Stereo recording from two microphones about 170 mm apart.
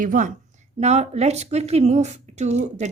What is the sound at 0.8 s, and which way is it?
Speech, 40° right (ahead or behind).